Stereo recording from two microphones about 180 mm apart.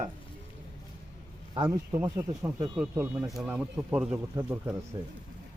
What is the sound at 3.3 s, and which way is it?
Speech, 5° right (ahead or behind).